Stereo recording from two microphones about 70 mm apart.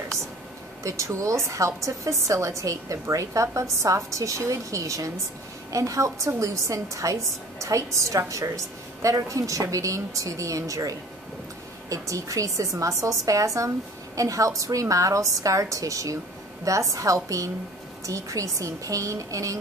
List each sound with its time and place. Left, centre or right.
0.8 s a woman's voice: right